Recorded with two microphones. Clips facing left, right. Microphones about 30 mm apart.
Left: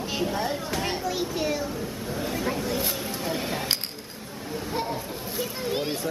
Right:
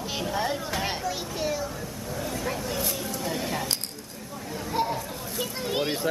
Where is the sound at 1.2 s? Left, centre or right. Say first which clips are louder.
Left 2 dB; centre.